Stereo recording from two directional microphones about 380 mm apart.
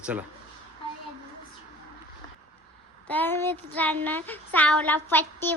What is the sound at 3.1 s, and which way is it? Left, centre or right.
Child singing, centre.